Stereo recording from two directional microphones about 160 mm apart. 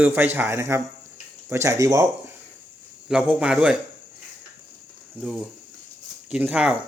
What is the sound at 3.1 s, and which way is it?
Speech, 5° right (ahead or behind).